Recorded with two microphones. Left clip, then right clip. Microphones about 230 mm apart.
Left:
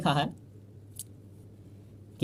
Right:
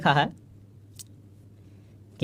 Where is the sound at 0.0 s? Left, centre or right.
Right.